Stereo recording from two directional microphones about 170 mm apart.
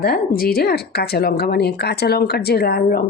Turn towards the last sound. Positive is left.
turn(degrees=65)  # may be behind; listen again after turning